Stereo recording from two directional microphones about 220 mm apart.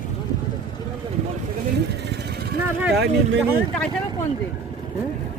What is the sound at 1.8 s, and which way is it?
Vehicle, 50° right (ahead or behind).